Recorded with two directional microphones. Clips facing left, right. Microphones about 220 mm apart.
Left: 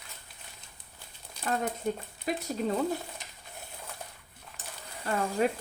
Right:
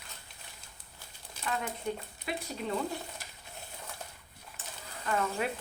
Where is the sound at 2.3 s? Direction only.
40° left (ahead or behind).